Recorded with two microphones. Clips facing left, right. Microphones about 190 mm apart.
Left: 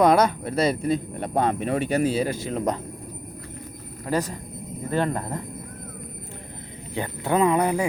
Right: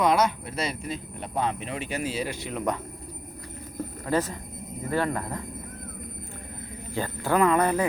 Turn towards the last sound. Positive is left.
turn(degrees=15)  # may be behind; listen again after turning